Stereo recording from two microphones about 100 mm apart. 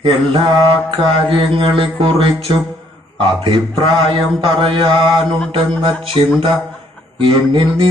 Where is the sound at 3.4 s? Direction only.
55° right (ahead or behind).